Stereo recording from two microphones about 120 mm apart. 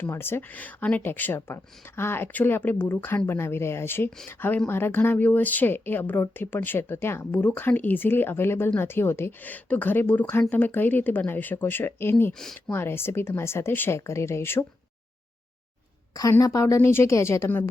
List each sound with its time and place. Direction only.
0.0 s a woman's voice: 20° left (ahead or behind)
12.3 s speech: 5° left (ahead or behind)
12.7 s speech: 20° left (ahead or behind)
16.4 s speech: 25° left (ahead or behind)